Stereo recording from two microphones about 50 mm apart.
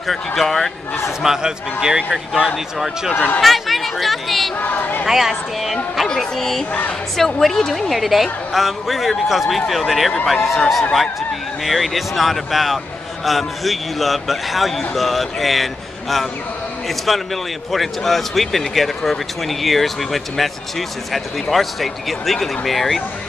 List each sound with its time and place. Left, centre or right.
0.0 s a man's voice: centre
1.2 s a man's voice: centre
3.3 s speech: centre
4.6 s speech: left
5.0 s a man's voice: centre
5.3 s a sound: centre
6.0 s a man's voice: centre
17.7 s a man's voice: centre